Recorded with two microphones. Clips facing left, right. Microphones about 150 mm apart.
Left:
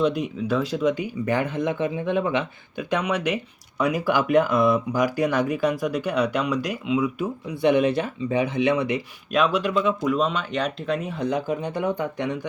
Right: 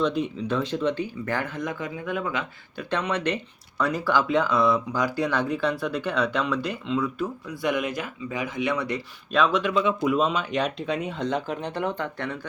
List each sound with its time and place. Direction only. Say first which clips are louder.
0.0 s speech: left 2 dB; 10° left (ahead or behind)
7.6 s speech: left 7 dB; 25° left (ahead or behind)
9.3 s speech: left 1 dB; 10° left (ahead or behind)